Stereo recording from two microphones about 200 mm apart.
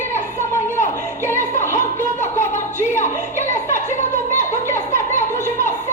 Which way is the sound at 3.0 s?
40° left (ahead or behind).